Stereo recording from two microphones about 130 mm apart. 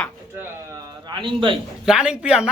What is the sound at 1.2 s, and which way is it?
Speech, 40° right (ahead or behind).